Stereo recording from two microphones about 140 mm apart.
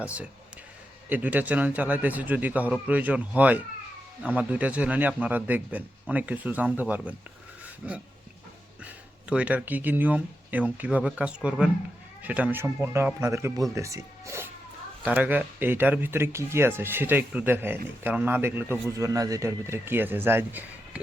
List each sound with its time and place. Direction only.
0.0 s a man's voice: 10° right (ahead or behind)
9.3 s a man's voice: 10° right (ahead or behind)